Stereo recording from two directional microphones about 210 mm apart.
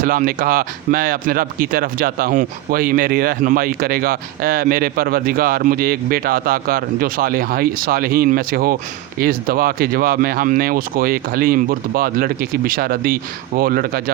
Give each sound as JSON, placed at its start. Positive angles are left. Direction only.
{"t": 0.0, "sound": "speech", "side_deg": -40}